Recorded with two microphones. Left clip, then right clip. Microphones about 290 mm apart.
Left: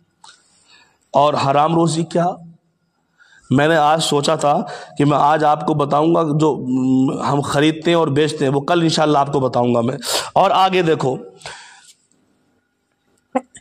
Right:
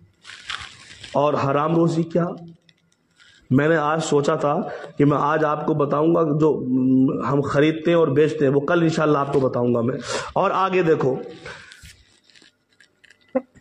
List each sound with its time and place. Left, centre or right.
1.1 s a man's voice: left
3.5 s a man's voice: left